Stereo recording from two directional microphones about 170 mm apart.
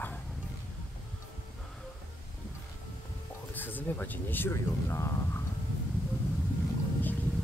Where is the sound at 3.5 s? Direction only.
10° left (ahead or behind).